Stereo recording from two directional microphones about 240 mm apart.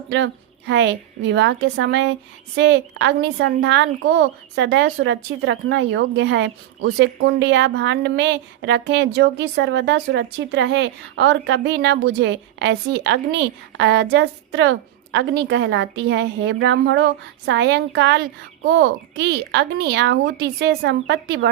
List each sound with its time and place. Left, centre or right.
0.1 s speech: right